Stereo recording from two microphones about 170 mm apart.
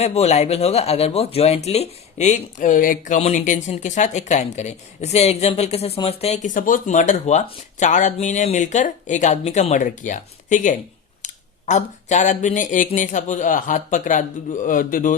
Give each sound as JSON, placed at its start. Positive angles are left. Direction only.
{"t": 0.0, "sound": "speech", "side_deg": 40}